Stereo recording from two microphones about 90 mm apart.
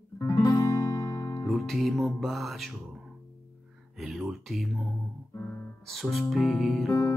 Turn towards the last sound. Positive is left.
turn(degrees=0)  # may be behind; listen again after turning